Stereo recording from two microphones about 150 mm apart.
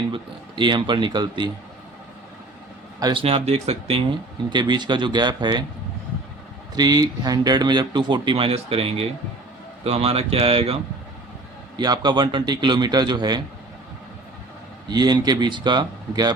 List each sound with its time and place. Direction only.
0.1 s speech: 30° right (ahead or behind)
3.0 s speech: 35° right (ahead or behind)
4.4 s a man's voice: 30° right (ahead or behind)
6.7 s speech: 25° right (ahead or behind)
11.8 s a man's voice: 30° right (ahead or behind)
14.8 s a man's voice: 30° right (ahead or behind)